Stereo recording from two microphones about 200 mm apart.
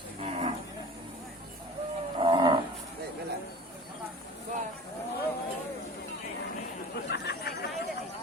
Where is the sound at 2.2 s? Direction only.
25° right (ahead or behind).